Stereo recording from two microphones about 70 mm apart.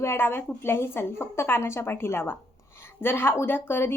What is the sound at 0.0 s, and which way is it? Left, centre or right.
A woman's voice, left.